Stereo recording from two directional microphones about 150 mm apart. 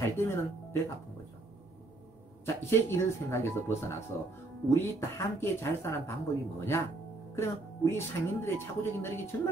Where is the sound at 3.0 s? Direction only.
15° left (ahead or behind).